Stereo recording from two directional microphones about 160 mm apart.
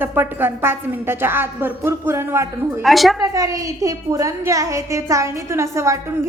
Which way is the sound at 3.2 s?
20° right (ahead or behind).